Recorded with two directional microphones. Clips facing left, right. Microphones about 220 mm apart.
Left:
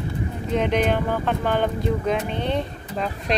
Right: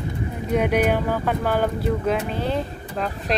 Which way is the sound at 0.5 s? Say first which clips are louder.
Right 1 dB; 10° right (ahead or behind).